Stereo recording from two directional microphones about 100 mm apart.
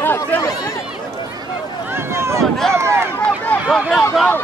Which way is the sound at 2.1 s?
25° right (ahead or behind).